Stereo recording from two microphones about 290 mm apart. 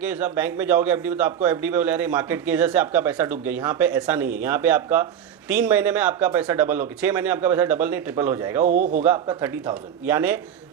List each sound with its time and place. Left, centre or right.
0.0 s a man's voice: centre
8.6 s a man's voice: right
9.0 s a man's voice: centre